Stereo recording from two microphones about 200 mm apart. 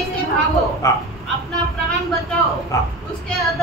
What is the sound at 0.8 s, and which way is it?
Speech, 15° left (ahead or behind).